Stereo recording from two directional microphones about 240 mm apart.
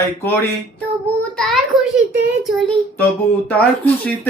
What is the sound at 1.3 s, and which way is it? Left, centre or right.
Child singing, centre.